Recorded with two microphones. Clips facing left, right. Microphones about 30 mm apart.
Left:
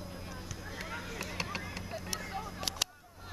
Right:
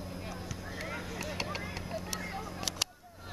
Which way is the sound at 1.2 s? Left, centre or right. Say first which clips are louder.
Right 1 dB; centre.